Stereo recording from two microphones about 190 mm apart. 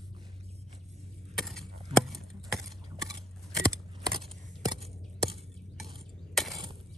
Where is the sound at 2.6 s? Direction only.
15° right (ahead or behind).